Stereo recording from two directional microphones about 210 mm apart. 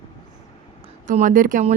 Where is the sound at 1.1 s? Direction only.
40° right (ahead or behind).